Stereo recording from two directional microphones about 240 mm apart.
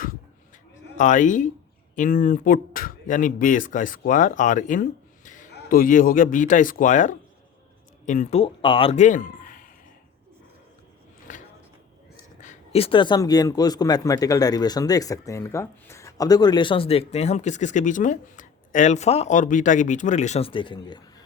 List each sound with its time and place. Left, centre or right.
0.9 s a man's voice: left
11.3 s a sound: left
12.4 s speech: left